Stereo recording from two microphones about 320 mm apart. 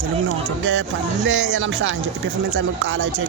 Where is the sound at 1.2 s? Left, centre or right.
Right.